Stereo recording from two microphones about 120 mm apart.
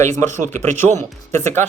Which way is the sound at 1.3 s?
20° left (ahead or behind).